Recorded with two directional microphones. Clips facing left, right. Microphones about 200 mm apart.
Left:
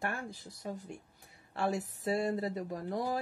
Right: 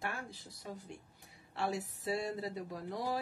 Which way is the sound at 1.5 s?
50° left (ahead or behind).